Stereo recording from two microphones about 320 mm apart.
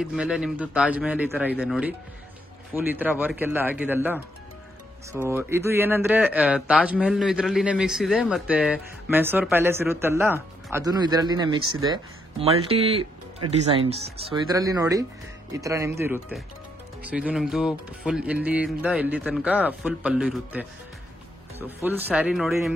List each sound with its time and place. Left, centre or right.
0.0 s speech: centre
5.2 s speech: centre